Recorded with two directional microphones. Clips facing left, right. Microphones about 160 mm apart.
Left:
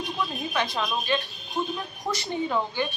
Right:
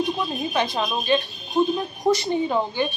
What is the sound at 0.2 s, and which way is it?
Speech, 20° right (ahead or behind).